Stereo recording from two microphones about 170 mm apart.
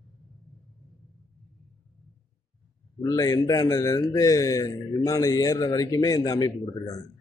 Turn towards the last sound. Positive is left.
turn(degrees=20)  # may be behind; listen again after turning